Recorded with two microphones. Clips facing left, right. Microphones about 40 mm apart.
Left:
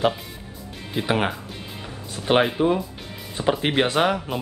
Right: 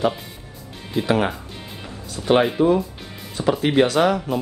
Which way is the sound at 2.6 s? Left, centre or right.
Left.